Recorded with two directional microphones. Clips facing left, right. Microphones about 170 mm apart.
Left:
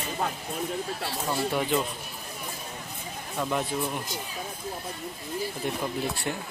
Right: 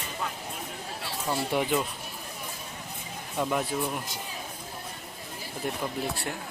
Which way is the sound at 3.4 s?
5° right (ahead or behind).